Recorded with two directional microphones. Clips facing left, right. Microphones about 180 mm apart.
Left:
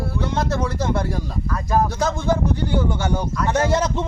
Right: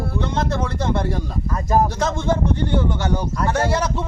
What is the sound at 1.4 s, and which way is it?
Speech, 20° right (ahead or behind).